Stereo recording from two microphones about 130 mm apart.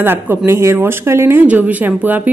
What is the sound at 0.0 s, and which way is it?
Speech, 15° right (ahead or behind).